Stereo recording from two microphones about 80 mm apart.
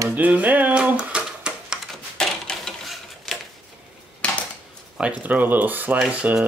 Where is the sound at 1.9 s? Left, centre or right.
Centre.